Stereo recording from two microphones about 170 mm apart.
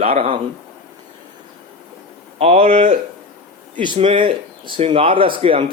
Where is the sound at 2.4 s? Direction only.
35° right (ahead or behind).